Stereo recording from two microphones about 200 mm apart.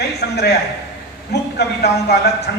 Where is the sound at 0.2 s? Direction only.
55° left (ahead or behind).